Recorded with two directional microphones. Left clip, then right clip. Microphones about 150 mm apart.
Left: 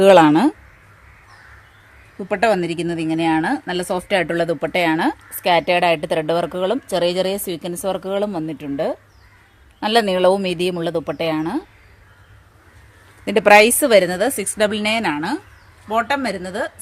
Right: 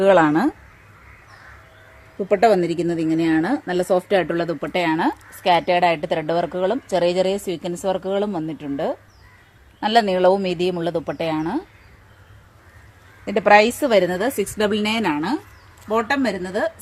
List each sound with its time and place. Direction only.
0.0 s speech: 90° left; by 0.5 s 70° left (ahead or behind)
2.3 s a woman's voice: 45° left (ahead or behind)
9.8 s a woman's voice: 60° left (ahead or behind); by 11.6 s 40° left (ahead or behind)
13.2 s a woman's voice: 90° left; by 16.7 s 30° left (ahead or behind)